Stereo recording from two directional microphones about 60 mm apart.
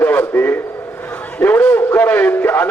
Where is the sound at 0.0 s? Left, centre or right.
Left.